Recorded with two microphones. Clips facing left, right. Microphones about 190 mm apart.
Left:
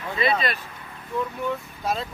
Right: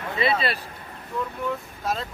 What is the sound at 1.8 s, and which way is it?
Speech, 5° left (ahead or behind).